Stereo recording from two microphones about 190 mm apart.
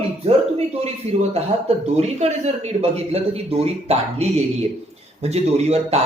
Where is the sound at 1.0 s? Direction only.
35° right (ahead or behind).